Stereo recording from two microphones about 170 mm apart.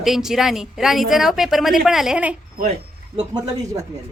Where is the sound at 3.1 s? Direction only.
20° right (ahead or behind).